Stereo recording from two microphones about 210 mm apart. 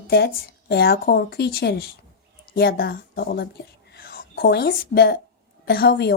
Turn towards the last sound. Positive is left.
turn(degrees=50)  # may be behind; listen again after turning